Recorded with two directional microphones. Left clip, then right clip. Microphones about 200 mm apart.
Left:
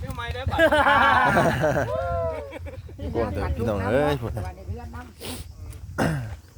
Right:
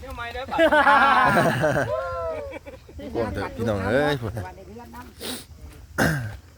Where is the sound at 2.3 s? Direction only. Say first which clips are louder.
Right 1 dB; 35° left (ahead or behind).